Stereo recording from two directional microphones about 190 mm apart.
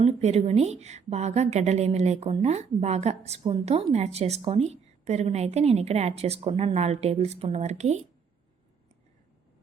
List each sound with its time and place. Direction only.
0.0 s a woman's voice: 35° right (ahead or behind)